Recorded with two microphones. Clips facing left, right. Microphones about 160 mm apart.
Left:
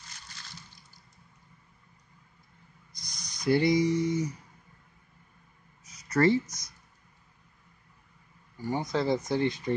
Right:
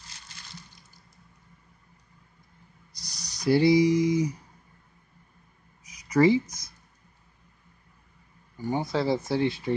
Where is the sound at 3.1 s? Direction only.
70° right (ahead or behind).